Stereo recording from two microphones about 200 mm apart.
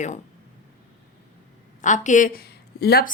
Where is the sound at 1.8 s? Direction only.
40° left (ahead or behind).